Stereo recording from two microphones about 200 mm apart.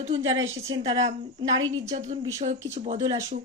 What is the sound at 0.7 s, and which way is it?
Speech, 25° right (ahead or behind).